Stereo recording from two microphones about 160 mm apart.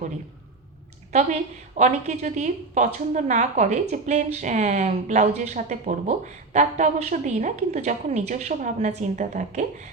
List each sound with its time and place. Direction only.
1.1 s speech: 45° right (ahead or behind)